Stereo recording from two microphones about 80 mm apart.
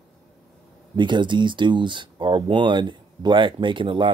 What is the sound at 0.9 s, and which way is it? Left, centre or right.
Speech, right.